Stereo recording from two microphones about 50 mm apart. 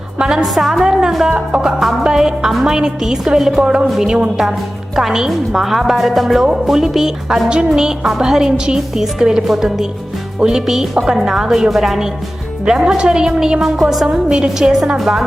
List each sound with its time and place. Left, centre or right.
0.2 s speech: centre
0.4 s a woman's voice: centre
3.6 s speech: centre
3.8 s speech: centre
14.9 s a woman's voice: centre